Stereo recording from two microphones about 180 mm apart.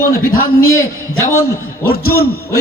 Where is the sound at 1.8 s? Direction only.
60° left (ahead or behind).